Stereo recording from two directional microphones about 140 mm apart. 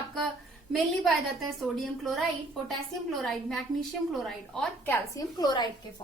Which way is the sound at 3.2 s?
Centre (ahead or behind).